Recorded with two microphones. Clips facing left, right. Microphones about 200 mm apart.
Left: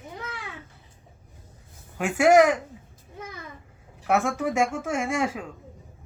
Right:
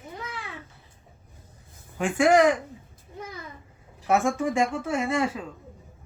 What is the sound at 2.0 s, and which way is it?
Speech, 5° left (ahead or behind).